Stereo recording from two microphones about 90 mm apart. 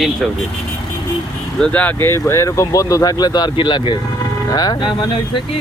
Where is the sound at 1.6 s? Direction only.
15° left (ahead or behind); by 5.0 s 55° left (ahead or behind).